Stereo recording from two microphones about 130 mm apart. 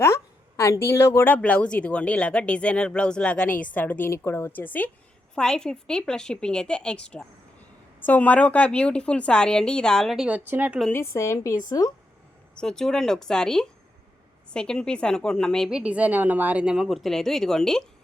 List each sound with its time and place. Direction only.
0.0 s a woman's voice: 20° left (ahead or behind); by 10.2 s centre (ahead or behind)
10.2 s speech: 15° right (ahead or behind)
10.9 s a woman's voice: 20° left (ahead or behind)
12.5 s speech: 5° left (ahead or behind)
15.7 s speech: 10° right (ahead or behind)